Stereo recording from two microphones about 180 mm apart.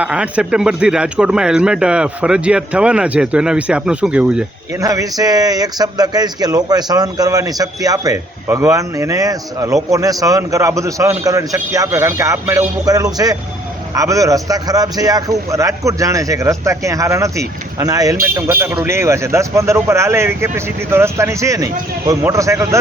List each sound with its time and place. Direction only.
0.0 s speech: 5° right (ahead or behind)
4.8 s a man's voice: 20° right (ahead or behind)